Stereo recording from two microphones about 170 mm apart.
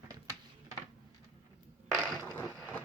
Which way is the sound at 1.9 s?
Centre (ahead or behind).